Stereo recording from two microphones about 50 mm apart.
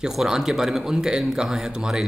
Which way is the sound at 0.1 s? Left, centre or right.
Centre.